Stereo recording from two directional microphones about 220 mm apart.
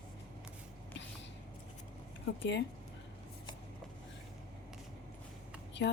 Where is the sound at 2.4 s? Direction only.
55° left (ahead or behind).